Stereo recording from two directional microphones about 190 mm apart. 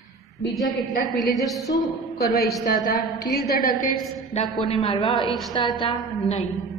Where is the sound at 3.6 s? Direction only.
45° left (ahead or behind).